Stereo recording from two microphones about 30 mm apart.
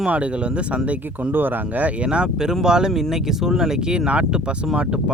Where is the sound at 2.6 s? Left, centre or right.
Centre.